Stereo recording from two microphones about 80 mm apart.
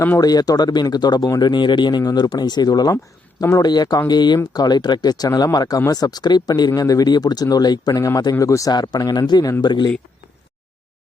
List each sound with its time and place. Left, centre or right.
0.2 s speech: left
6.7 s speech: left
8.7 s speech: left